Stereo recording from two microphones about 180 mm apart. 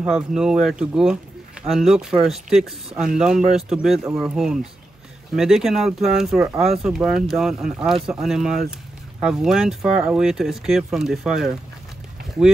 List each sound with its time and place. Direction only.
0.0 s speech: 5° right (ahead or behind)